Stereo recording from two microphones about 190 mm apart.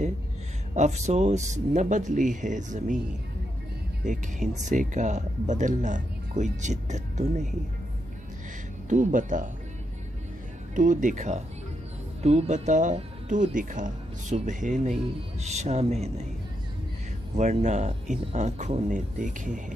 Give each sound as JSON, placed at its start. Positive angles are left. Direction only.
{"t": 0.7, "sound": "speech", "side_deg": -35}
{"t": 4.0, "sound": "speech", "side_deg": -40}
{"t": 8.8, "sound": "speech", "side_deg": -40}
{"t": 10.7, "sound": "speech", "side_deg": -45}
{"t": 17.4, "sound": "speech", "side_deg": -40}